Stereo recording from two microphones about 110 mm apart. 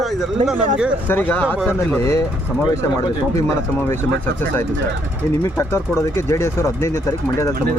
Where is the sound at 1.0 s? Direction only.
15° left (ahead or behind).